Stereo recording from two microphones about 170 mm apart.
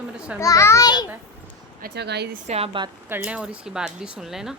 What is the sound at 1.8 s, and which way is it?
Speech, 70° right (ahead or behind).